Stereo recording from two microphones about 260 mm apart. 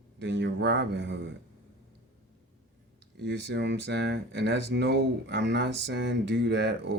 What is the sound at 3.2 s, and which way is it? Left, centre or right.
Speech, right.